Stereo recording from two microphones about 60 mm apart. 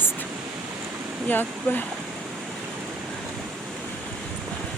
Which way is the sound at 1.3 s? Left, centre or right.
Left.